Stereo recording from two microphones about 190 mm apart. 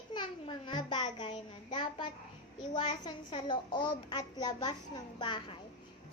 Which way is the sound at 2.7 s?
25° left (ahead or behind).